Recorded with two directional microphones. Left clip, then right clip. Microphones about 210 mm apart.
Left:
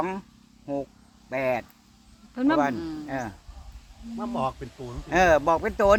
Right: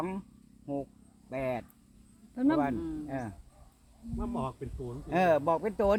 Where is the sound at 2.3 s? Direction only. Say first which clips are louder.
Left 5 dB; 30° left (ahead or behind).